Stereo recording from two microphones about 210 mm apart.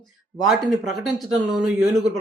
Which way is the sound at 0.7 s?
Centre (ahead or behind).